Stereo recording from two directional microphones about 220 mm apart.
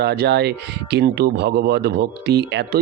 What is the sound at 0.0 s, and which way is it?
A man's voice, 50° right (ahead or behind).